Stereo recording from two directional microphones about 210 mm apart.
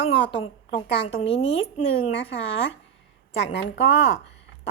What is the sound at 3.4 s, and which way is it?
Speech, 55° left (ahead or behind).